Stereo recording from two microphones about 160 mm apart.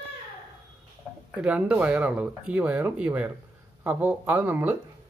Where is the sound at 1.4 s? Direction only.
5° right (ahead or behind).